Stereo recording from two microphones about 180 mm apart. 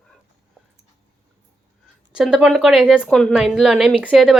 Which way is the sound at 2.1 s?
5° right (ahead or behind).